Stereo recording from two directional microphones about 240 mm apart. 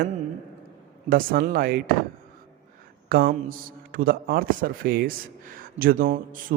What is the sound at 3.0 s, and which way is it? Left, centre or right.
A man's voice, right.